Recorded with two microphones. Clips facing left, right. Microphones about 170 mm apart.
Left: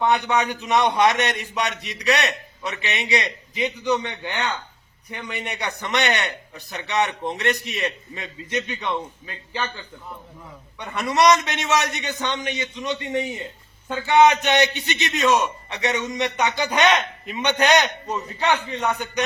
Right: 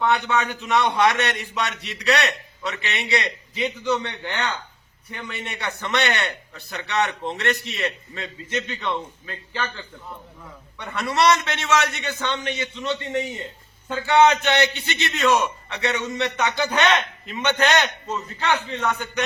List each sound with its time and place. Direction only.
0.0 s a man's voice: 15° left (ahead or behind)
10.8 s a man's voice: 15° left (ahead or behind)